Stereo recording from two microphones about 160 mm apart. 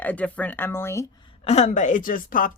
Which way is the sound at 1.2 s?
40° left (ahead or behind).